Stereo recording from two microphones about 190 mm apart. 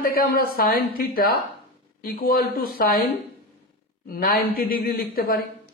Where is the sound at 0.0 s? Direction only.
50° left (ahead or behind).